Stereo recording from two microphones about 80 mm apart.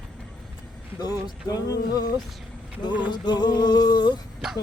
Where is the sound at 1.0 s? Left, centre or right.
Left.